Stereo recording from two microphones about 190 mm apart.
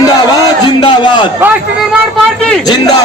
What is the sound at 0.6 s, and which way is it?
Speech, 25° left (ahead or behind).